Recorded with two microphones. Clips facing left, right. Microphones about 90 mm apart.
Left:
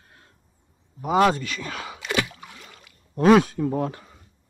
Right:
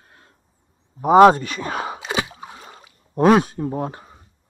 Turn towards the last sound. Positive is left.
turn(degrees=-30)  # may be behind; listen again after turning